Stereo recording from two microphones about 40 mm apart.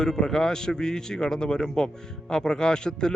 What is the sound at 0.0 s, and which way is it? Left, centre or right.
Speech, centre.